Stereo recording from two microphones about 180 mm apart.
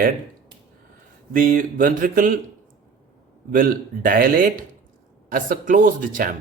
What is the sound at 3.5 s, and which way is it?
Speech, 50° right (ahead or behind).